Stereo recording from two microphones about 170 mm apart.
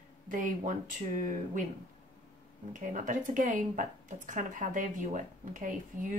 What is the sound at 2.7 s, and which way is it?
A woman's voice, 50° right (ahead or behind).